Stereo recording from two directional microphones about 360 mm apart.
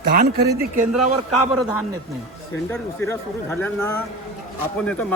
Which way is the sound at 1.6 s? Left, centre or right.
Centre.